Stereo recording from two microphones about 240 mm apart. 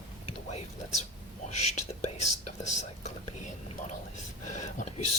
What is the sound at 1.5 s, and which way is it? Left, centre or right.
Speech, left.